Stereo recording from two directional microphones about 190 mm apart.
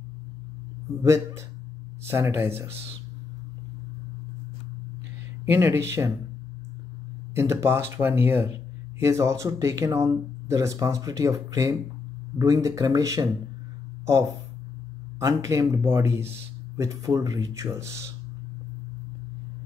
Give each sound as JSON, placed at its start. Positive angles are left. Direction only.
{"t": 1.0, "sound": "speech", "side_deg": -15}
{"t": 5.4, "sound": "speech", "side_deg": -15}
{"t": 7.3, "sound": "speech", "side_deg": -15}
{"t": 15.1, "sound": "speech", "side_deg": -15}